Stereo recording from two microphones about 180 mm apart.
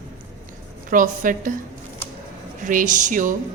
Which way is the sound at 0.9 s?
50° right (ahead or behind).